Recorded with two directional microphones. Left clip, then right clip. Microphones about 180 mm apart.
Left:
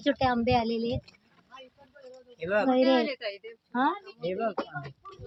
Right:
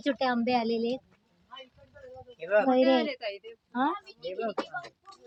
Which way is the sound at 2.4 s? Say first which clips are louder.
Right 2 dB; 20° left (ahead or behind).